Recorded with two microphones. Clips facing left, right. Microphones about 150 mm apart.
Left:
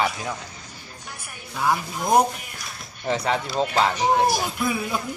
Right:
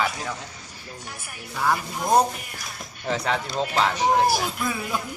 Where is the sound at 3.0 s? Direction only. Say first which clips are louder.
Left 2 dB; centre (ahead or behind).